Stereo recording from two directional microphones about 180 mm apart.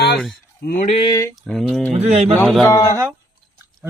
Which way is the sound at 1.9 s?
35° right (ahead or behind).